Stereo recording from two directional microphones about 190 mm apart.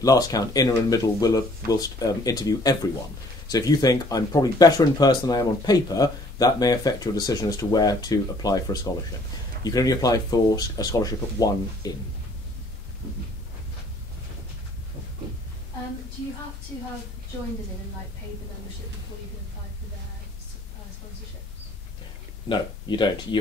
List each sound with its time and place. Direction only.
0.0 s speech: 20° left (ahead or behind)
22.5 s speech: 25° left (ahead or behind)